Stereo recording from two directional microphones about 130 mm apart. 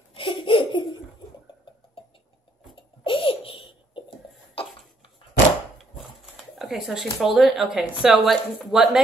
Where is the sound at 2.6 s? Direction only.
40° left (ahead or behind).